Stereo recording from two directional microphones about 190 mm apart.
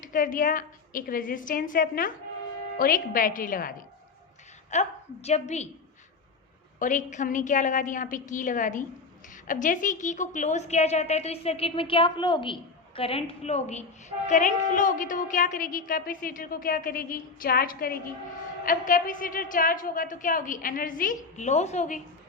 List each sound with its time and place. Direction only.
0.0 s a woman's voice: 45° left (ahead or behind)
4.7 s a woman's voice: 35° left (ahead or behind)
6.7 s a woman's voice: 40° left (ahead or behind)